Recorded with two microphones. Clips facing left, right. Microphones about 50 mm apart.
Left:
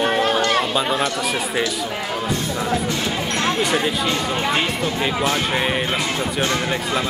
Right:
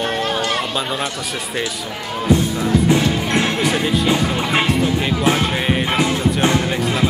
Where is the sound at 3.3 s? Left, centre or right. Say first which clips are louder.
Right 1 dB; centre.